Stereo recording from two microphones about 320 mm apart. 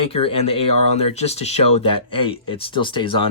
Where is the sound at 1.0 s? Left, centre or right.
Centre.